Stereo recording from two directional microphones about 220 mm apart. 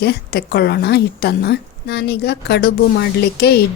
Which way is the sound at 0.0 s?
45° left (ahead or behind).